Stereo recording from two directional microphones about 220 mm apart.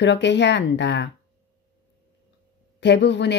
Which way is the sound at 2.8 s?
50° left (ahead or behind).